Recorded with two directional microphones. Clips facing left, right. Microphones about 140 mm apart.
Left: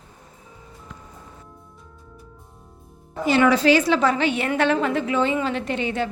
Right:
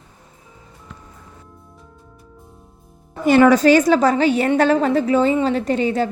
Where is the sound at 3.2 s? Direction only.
45° right (ahead or behind).